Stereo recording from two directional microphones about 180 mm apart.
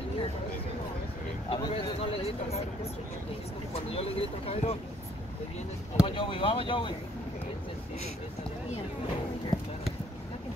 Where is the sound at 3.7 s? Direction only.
35° left (ahead or behind).